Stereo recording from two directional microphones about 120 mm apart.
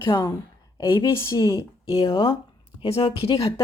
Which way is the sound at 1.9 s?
45° left (ahead or behind).